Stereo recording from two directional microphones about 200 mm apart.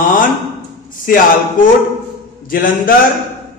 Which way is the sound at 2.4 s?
45° left (ahead or behind).